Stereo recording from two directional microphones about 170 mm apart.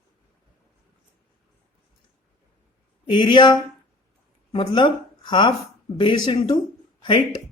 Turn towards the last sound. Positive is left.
turn(degrees=30)  # may be behind; listen again after turning